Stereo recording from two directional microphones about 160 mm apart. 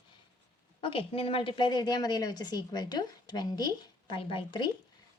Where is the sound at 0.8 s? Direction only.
35° left (ahead or behind).